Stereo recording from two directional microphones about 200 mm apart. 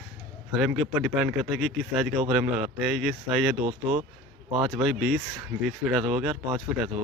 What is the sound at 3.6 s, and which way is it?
Speech, 35° right (ahead or behind).